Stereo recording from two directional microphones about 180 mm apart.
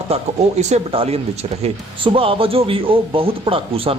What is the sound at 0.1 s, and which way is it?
Speech, 35° right (ahead or behind).